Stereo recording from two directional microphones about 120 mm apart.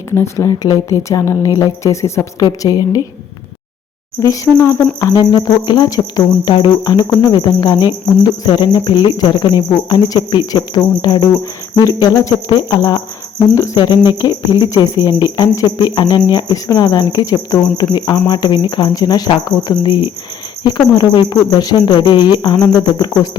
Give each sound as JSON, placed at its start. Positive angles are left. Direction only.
{"t": 0.1, "sound": "a woman's voice", "side_deg": 25}
{"t": 4.2, "sound": "a woman's voice", "side_deg": 25}